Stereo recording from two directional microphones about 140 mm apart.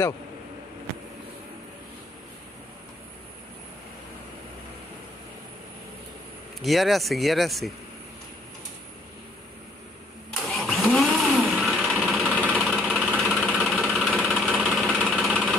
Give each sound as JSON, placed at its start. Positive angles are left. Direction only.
{"t": 6.6, "sound": "speech", "side_deg": 0}
{"t": 10.3, "sound": "engine starting", "side_deg": 0}
{"t": 11.5, "sound": "jackhammer", "side_deg": 0}
{"t": 11.9, "sound": "sewing machine", "side_deg": -10}
{"t": 12.3, "sound": "engine", "side_deg": -10}